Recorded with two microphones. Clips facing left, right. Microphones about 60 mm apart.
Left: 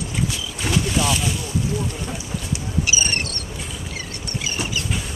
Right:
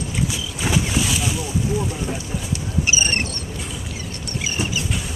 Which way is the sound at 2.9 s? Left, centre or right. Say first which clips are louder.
Right 3 dB; right.